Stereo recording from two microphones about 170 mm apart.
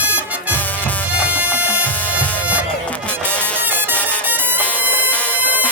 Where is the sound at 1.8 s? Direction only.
10° left (ahead or behind).